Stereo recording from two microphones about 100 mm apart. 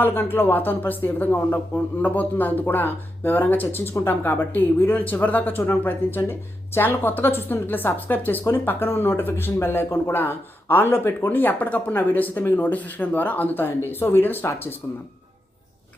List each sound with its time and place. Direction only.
0.0 s a woman's voice: 20° left (ahead or behind)